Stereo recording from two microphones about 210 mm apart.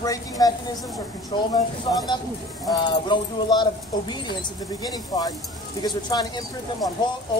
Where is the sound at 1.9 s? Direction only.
25° left (ahead or behind).